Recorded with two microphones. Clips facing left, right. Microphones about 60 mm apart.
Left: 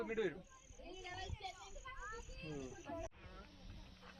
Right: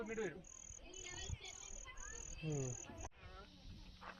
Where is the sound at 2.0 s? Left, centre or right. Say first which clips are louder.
Left 6 dB; left.